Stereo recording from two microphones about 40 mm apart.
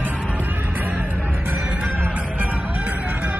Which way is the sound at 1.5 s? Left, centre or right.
Right.